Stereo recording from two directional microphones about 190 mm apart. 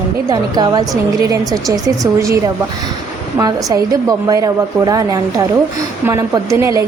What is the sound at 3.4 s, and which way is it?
A woman's voice, 20° right (ahead or behind).